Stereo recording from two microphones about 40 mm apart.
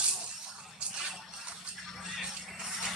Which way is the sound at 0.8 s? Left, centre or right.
Right.